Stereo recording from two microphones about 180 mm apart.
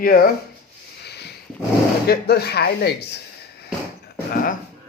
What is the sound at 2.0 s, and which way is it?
Speech, 60° left (ahead or behind).